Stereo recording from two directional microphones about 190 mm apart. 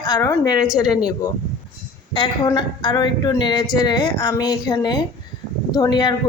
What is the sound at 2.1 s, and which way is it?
A woman's voice, 20° left (ahead or behind).